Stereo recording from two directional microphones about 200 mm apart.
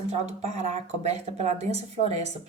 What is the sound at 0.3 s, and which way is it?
Speech, 35° right (ahead or behind).